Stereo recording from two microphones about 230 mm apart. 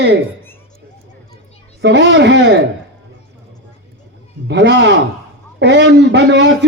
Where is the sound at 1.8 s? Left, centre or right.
Right.